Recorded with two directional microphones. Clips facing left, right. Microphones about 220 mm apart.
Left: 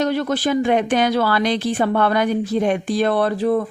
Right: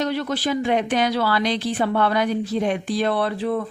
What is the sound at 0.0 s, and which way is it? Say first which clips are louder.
Speech: left 4 dB; 50° left (ahead or behind).